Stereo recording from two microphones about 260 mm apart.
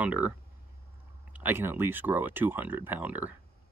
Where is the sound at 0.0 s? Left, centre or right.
Centre.